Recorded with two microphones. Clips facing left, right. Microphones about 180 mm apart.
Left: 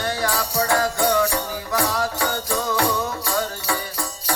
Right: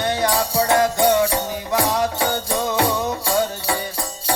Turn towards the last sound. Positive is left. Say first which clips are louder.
# right 4 dB
turn(degrees=-25)  # may be behind; listen again after turning